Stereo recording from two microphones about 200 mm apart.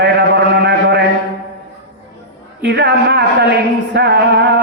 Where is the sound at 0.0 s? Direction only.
55° right (ahead or behind).